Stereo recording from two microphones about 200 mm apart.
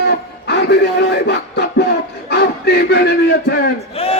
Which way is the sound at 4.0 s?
30° left (ahead or behind).